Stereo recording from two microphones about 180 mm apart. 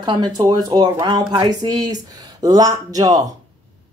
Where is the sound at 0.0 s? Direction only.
25° right (ahead or behind).